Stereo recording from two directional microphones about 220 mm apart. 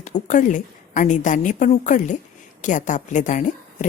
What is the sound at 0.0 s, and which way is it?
A woman's voice, 35° left (ahead or behind).